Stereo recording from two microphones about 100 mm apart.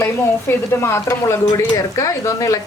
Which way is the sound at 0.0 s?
25° left (ahead or behind).